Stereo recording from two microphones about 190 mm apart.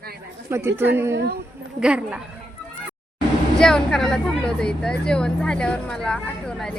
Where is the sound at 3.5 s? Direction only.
5° left (ahead or behind).